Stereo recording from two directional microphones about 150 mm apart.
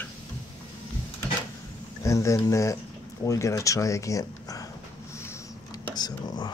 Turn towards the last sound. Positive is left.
turn(degrees=25)  # may be behind; listen again after turning